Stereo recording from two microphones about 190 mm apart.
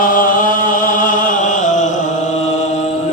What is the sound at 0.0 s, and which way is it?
Chant, 45° left (ahead or behind).